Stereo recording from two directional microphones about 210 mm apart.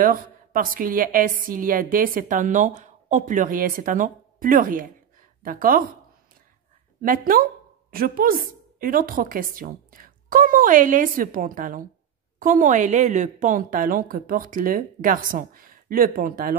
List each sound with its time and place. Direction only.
0.0 s a woman's voice: 40° right (ahead or behind)
7.0 s a woman's voice: 40° right (ahead or behind)